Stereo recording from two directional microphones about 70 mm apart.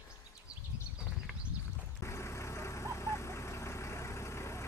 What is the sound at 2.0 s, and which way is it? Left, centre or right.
Vehicle, left.